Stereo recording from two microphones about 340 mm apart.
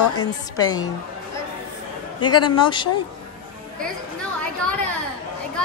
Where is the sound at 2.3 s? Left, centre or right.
Left.